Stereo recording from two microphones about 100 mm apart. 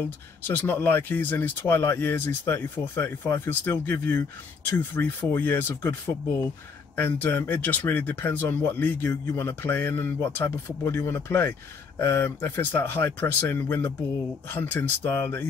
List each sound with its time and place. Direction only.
0.0 s speech: 20° left (ahead or behind)
7.0 s speech: 20° left (ahead or behind)